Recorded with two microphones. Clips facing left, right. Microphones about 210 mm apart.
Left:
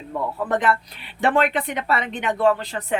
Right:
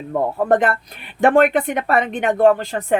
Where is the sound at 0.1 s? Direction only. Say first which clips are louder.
Right 7 dB; 50° right (ahead or behind).